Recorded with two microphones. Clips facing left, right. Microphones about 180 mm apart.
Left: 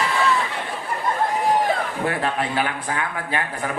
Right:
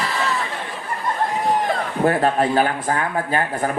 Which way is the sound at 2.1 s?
40° right (ahead or behind).